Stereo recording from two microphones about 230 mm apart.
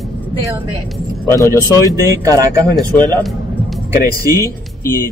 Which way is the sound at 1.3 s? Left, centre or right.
Centre.